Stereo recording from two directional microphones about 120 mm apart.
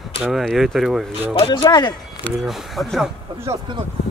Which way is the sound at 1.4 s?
40° left (ahead or behind).